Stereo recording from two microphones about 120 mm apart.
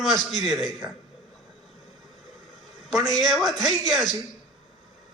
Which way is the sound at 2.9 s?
Centre (ahead or behind).